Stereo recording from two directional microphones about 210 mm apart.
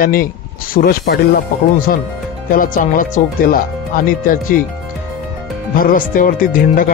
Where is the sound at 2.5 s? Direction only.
40° left (ahead or behind).